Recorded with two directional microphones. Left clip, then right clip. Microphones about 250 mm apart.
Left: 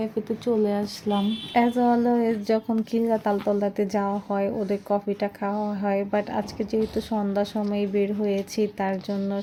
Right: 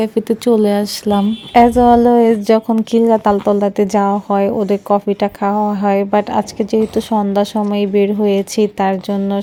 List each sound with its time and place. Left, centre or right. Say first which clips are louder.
0.0 s speech: right 12 dB; right